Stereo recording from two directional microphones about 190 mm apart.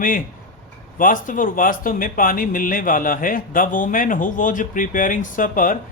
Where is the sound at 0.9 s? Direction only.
45° left (ahead or behind).